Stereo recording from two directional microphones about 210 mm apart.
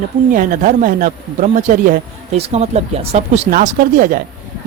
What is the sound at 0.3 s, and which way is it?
A man's voice, 40° right (ahead or behind).